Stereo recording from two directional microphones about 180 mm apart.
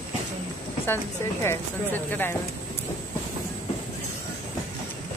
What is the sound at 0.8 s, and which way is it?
Speech, 15° left (ahead or behind).